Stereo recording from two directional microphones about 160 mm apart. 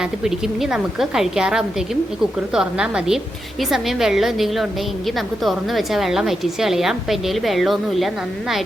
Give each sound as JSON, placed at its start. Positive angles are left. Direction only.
{"t": 0.0, "sound": "a woman's voice", "side_deg": -5}